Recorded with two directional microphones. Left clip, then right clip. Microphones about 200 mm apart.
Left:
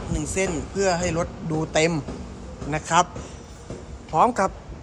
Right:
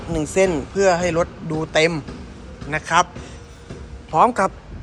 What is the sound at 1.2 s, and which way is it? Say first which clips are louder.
Speech: right 5 dB; 15° left (ahead or behind).